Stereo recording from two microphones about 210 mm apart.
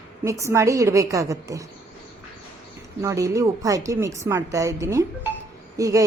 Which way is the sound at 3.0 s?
15° right (ahead or behind).